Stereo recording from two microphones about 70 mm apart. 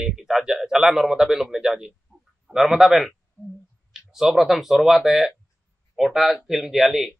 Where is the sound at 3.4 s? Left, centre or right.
Left.